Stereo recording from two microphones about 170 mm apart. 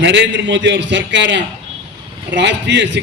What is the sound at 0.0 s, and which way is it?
A man's voice, 90° right.